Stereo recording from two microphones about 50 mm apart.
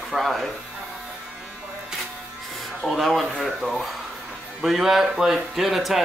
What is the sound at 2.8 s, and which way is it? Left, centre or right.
Speech, centre.